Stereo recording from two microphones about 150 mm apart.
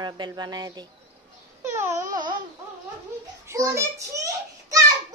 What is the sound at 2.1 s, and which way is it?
Speech, 30° right (ahead or behind).